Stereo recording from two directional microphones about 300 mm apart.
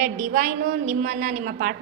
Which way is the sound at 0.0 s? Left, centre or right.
Right.